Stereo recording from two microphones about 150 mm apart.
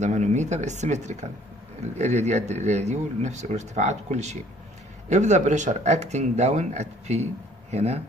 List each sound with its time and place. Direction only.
0.0 s speech: 50° right (ahead or behind)